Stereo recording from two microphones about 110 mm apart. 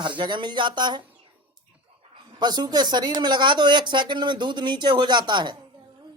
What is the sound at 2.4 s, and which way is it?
Speech, 40° right (ahead or behind).